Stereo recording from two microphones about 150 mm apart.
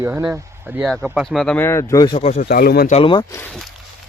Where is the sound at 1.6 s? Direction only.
20° left (ahead or behind).